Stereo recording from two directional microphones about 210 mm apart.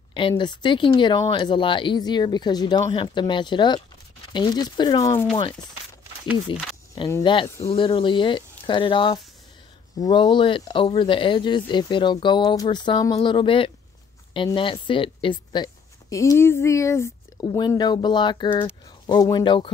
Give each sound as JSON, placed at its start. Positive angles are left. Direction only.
{"t": 0.3, "sound": "speech", "side_deg": 20}
{"t": 6.5, "sound": "speech", "side_deg": 25}